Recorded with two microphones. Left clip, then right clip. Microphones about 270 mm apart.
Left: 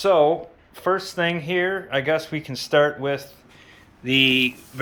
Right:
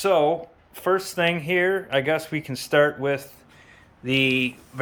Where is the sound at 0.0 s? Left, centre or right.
Centre.